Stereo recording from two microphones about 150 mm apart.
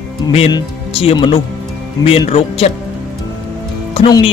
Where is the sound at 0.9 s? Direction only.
35° left (ahead or behind).